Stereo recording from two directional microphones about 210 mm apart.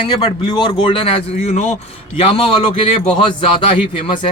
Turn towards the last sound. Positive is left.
turn(degrees=25)  # may be behind; listen again after turning